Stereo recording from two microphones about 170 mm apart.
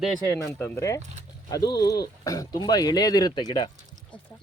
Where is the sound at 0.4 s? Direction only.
15° left (ahead or behind).